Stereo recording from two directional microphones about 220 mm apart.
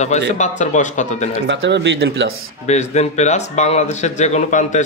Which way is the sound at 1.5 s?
55° right (ahead or behind).